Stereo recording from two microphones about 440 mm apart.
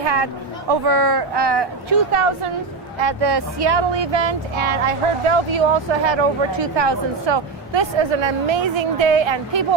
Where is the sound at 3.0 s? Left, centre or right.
Right.